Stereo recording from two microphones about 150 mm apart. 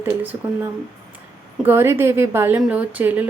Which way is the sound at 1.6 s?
15° right (ahead or behind).